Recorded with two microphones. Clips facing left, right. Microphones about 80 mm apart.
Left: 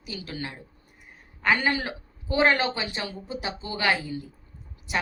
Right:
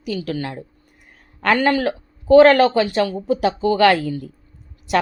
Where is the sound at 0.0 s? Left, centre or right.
Right.